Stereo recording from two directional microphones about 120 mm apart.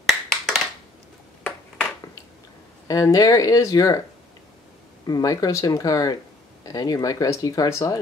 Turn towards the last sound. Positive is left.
turn(degrees=30)  # may be behind; listen again after turning